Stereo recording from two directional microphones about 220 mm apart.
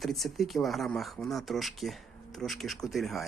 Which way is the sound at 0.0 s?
Centre (ahead or behind).